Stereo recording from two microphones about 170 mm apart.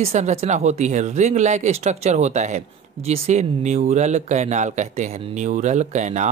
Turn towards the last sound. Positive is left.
turn(degrees=-45)  # may be behind; listen again after turning